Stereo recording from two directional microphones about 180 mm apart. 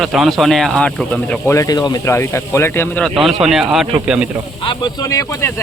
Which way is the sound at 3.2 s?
Centre (ahead or behind).